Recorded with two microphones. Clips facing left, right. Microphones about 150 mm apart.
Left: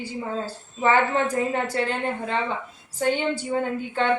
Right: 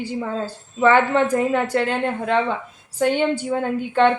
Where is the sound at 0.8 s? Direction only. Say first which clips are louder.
Right 5 dB; 65° right (ahead or behind).